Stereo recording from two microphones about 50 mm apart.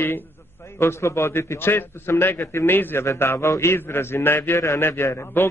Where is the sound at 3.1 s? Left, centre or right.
Left.